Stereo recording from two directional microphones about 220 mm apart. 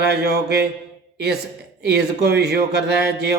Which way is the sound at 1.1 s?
45° right (ahead or behind).